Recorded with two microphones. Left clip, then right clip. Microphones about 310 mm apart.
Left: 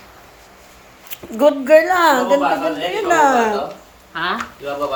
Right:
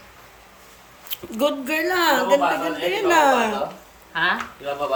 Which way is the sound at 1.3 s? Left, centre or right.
Centre.